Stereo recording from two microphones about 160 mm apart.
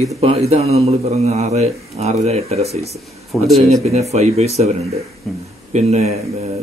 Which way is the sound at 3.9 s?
40° right (ahead or behind).